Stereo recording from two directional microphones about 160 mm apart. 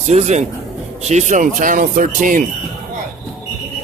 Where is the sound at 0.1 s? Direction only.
45° right (ahead or behind).